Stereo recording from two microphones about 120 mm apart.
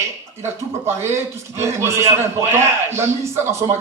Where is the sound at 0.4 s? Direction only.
20° right (ahead or behind).